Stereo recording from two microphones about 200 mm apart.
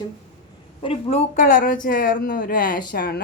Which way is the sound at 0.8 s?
30° left (ahead or behind).